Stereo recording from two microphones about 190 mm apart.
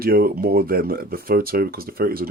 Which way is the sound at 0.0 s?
50° right (ahead or behind).